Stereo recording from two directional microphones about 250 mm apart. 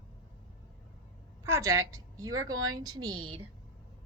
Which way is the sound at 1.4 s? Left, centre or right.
Centre.